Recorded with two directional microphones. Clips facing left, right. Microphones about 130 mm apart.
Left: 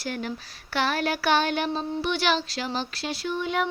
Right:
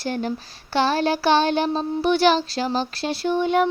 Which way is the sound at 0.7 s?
30° right (ahead or behind).